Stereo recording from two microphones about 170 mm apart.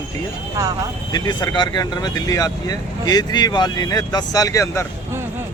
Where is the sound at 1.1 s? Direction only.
25° left (ahead or behind).